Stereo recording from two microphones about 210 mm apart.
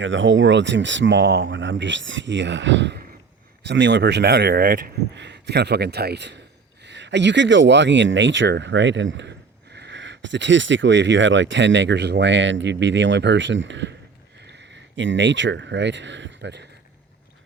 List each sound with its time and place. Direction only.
0.0 s speech: 60° right (ahead or behind)